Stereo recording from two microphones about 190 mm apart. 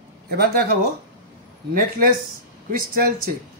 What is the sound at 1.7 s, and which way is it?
Speech, 45° right (ahead or behind).